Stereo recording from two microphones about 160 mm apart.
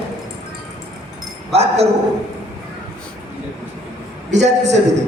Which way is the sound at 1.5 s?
40° right (ahead or behind).